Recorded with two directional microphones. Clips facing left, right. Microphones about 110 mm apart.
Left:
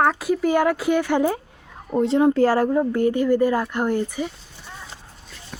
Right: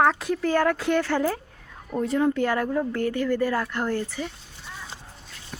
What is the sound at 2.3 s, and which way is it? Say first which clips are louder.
Speech: left 6 dB; 35° left (ahead or behind).